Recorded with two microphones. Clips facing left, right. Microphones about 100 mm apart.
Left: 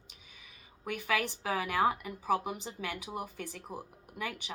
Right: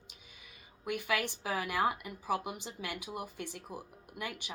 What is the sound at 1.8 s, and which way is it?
Speech, 35° left (ahead or behind).